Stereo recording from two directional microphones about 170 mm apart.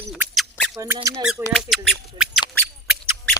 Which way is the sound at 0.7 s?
15° right (ahead or behind).